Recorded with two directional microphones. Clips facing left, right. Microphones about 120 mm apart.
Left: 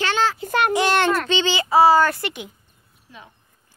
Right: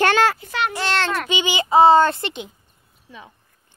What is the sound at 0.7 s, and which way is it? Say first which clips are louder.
Speech: left 6 dB; 15° left (ahead or behind).